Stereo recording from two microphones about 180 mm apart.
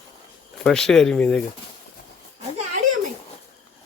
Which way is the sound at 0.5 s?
5° left (ahead or behind).